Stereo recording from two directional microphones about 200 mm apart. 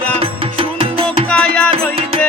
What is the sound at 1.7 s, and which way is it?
Music, 30° right (ahead or behind).